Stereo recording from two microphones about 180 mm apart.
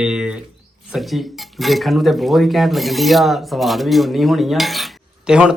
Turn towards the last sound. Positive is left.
turn(degrees=-5)  # may be behind; listen again after turning